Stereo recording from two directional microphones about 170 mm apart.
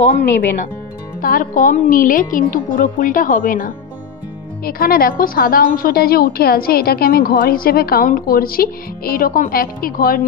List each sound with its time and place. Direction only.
1.2 s a woman's voice: 55° left (ahead or behind)